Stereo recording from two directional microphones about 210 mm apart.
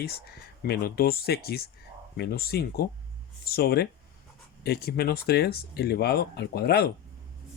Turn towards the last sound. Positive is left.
turn(degrees=50)  # may be behind; listen again after turning